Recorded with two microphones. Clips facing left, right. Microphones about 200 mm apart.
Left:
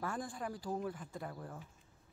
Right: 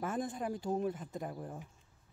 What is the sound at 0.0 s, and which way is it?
Speech, 20° right (ahead or behind).